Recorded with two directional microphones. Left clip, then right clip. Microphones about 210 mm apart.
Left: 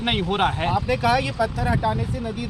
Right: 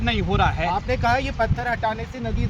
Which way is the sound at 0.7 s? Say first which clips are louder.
Left 1 dB; 15° left (ahead or behind).